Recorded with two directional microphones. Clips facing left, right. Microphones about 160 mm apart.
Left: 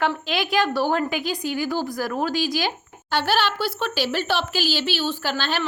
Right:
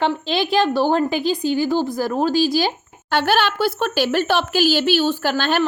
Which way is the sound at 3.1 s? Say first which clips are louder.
Right 4 dB; 55° right (ahead or behind).